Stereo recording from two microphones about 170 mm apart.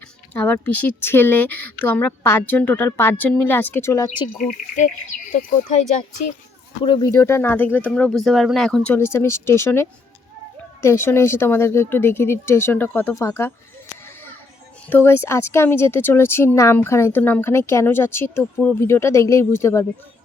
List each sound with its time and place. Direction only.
0.3 s a woman's voice: 10° left (ahead or behind)
4.4 s speech: 45° left (ahead or behind)
6.8 s a woman's voice: 25° left (ahead or behind)
14.8 s a woman's voice: 15° left (ahead or behind)